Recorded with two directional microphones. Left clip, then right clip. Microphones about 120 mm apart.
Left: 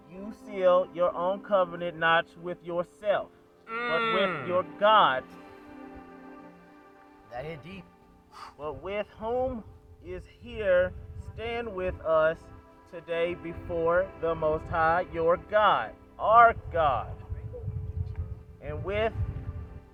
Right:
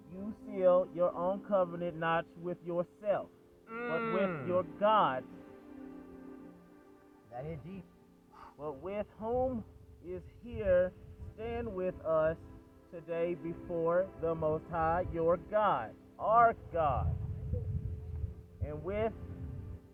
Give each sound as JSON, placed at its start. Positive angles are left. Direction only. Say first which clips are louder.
{"t": 0.4, "sound": "speech", "louder": "left 5 dB", "side_deg": -25}
{"t": 3.7, "sound": "speech", "louder": "left 8 dB", "side_deg": -5}
{"t": 4.5, "sound": "speech", "louder": "left 7 dB", "side_deg": -15}
{"t": 7.3, "sound": "speech", "louder": "left 6 dB", "side_deg": 15}
{"t": 8.4, "sound": "a sound", "louder": "left 8 dB", "side_deg": -5}
{"t": 8.6, "sound": "speech", "louder": "left 5 dB", "side_deg": -20}
{"t": 18.6, "sound": "speech", "louder": "left 6 dB", "side_deg": -20}